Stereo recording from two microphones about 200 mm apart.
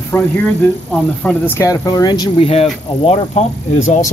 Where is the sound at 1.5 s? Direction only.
15° left (ahead or behind).